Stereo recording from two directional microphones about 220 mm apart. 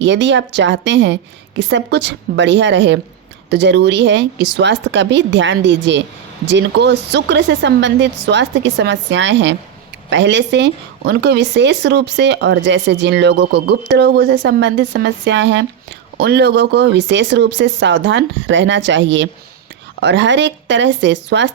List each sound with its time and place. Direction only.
0.0 s a woman's voice: 55° right (ahead or behind)